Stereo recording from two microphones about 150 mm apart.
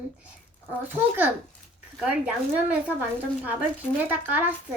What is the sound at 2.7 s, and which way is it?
A child's voice, 10° right (ahead or behind).